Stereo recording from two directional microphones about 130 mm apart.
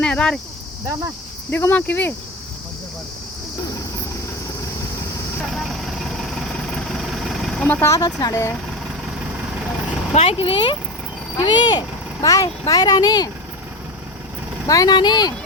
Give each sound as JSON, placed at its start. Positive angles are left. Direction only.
{"t": 0.0, "sound": "speech", "side_deg": 10}
{"t": 0.9, "sound": "speech", "side_deg": -25}
{"t": 1.5, "sound": "speech", "side_deg": 15}
{"t": 5.5, "sound": "vehicle", "side_deg": 0}
{"t": 7.9, "sound": "speech", "side_deg": 30}
{"t": 10.2, "sound": "speech", "side_deg": 45}
{"t": 14.7, "sound": "speech", "side_deg": 30}